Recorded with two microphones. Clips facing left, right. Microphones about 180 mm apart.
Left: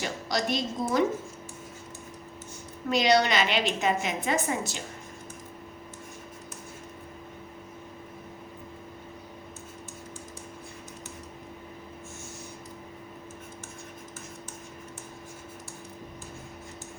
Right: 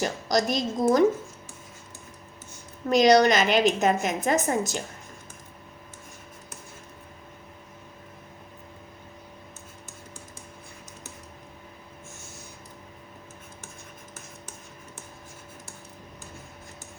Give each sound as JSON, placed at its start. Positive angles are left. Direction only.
{"t": 0.0, "sound": "a woman's voice", "side_deg": -40}
{"t": 2.9, "sound": "a woman's voice", "side_deg": -40}